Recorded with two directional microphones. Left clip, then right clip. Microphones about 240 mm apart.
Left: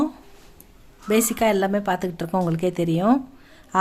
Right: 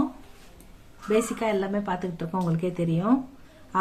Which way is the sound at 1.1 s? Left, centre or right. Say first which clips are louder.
Left 5 dB; left.